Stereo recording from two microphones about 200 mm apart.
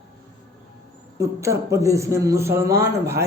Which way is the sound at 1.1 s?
15° right (ahead or behind).